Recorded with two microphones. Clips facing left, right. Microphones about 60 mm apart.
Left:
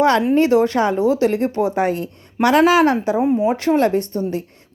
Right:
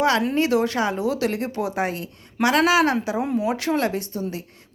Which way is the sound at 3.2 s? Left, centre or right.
Left.